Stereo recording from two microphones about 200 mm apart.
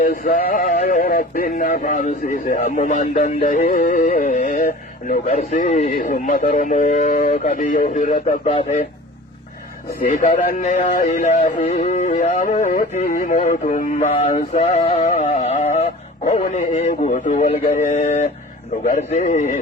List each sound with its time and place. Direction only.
0.0 s speech: 45° left (ahead or behind)
10.0 s speech: 45° left (ahead or behind)